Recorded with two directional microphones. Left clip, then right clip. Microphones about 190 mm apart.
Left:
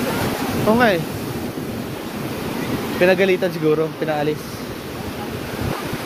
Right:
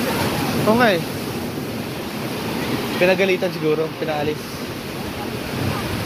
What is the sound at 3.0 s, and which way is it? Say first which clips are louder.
Speech: left 2 dB; 45° left (ahead or behind).